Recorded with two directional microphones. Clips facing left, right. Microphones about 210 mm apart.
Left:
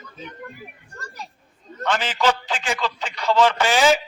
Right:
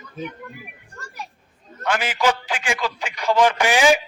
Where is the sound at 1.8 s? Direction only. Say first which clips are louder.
Even; 10° right (ahead or behind).